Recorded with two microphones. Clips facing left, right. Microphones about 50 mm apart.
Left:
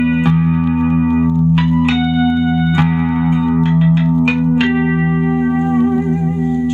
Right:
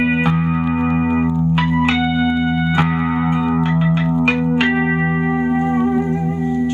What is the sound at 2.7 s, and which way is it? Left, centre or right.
Music, centre.